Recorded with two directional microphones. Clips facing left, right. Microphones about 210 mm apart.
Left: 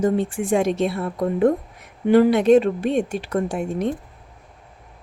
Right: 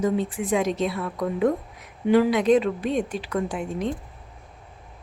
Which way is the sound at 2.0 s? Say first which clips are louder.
Left 4 dB; 55° left (ahead or behind).